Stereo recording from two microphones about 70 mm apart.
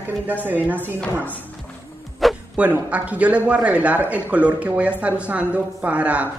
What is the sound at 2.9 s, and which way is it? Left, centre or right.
A woman's voice, centre.